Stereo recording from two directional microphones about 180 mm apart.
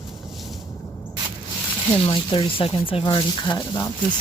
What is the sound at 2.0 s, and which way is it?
Speech, 30° left (ahead or behind).